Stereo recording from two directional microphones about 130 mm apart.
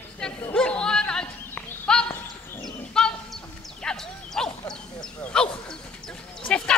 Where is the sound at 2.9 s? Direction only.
5° left (ahead or behind).